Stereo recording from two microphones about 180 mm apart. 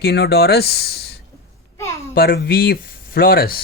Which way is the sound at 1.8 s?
15° left (ahead or behind).